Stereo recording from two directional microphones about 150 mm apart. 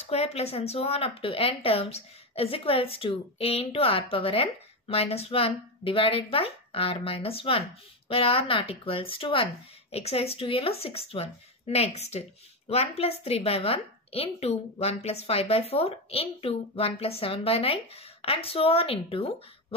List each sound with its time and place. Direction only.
0.1 s speech: 45° left (ahead or behind)